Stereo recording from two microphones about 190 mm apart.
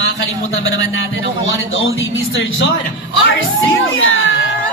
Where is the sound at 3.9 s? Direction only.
90° left.